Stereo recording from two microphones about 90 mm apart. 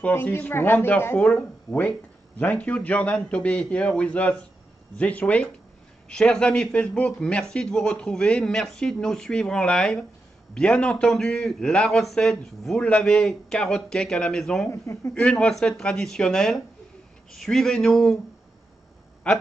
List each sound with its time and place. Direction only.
0.1 s a man's voice: 25° left (ahead or behind); by 14.7 s 5° left (ahead or behind)
14.7 s speech: 30° left (ahead or behind)
15.1 s a man's voice: 10° left (ahead or behind)
19.2 s a man's voice: 10° left (ahead or behind)